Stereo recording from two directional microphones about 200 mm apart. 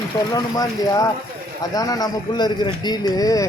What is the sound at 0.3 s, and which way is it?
Speech, 20° left (ahead or behind).